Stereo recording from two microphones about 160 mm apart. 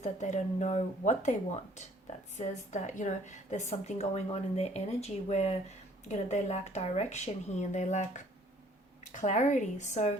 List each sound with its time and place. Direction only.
0.0 s a woman's voice: 45° left (ahead or behind)